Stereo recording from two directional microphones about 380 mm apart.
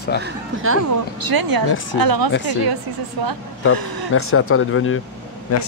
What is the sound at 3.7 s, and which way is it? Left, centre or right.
Speech, right.